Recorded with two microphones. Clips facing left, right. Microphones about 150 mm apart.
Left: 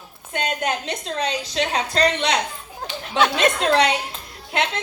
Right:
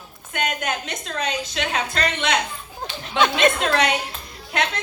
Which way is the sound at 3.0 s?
5° left (ahead or behind).